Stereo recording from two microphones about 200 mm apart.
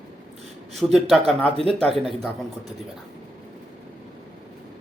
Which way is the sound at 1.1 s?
5° left (ahead or behind).